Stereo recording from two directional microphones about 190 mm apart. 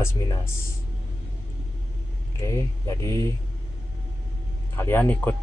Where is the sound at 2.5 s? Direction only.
15° left (ahead or behind).